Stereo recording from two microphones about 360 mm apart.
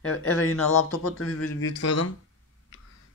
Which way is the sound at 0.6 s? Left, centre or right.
Left.